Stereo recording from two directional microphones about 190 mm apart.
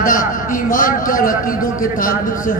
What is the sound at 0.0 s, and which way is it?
A man's voice, 45° left (ahead or behind).